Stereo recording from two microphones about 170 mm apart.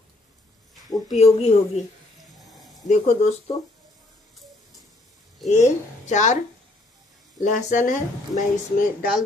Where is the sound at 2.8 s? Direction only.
45° left (ahead or behind).